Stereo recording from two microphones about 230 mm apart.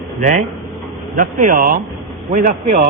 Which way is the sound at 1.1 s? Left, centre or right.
Right.